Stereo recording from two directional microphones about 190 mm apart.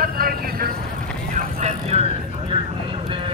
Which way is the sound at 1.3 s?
35° right (ahead or behind).